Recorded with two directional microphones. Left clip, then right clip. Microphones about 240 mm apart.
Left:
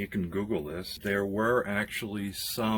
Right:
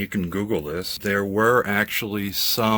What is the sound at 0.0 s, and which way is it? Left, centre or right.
Speech, right.